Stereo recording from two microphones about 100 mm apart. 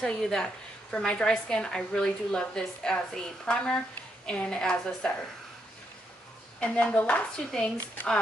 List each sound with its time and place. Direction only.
0.0 s a woman's voice: 5° left (ahead or behind)
6.6 s a woman's voice: 15° left (ahead or behind)